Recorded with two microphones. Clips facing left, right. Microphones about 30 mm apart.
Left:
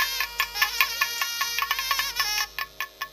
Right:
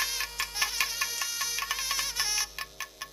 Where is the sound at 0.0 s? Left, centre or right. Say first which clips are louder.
Left 6 dB; left.